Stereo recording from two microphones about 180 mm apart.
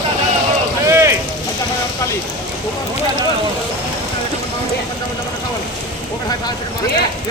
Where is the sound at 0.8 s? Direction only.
15° right (ahead or behind).